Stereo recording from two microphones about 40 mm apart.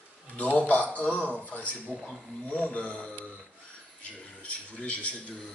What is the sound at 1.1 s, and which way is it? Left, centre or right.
Speech, left.